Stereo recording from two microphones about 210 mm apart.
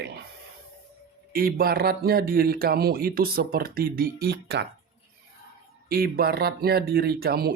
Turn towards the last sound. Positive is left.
turn(degrees=-50)  # may be behind; listen again after turning